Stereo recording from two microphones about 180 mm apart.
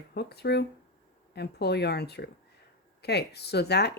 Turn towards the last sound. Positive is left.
turn(degrees=65)  # may be behind; listen again after turning